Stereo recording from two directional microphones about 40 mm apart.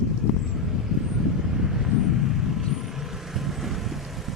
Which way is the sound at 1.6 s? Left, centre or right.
Centre.